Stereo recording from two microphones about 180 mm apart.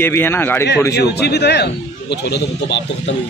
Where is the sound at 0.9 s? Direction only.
65° left (ahead or behind).